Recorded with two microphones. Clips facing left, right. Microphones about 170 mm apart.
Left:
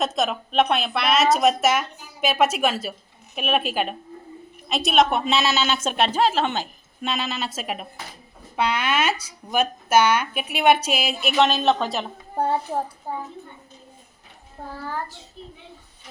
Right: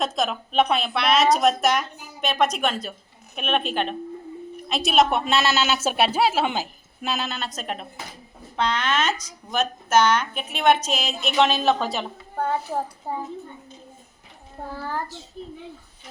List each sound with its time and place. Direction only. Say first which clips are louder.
0.0 s a woman's voice: left 1 dB; centre (ahead or behind)